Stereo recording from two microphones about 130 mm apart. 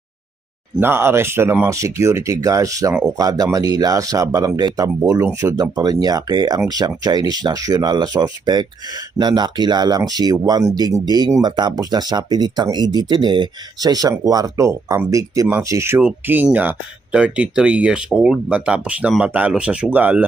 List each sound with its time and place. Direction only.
0.8 s speech: 15° right (ahead or behind)